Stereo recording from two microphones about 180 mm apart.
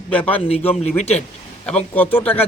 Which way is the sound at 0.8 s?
35° left (ahead or behind).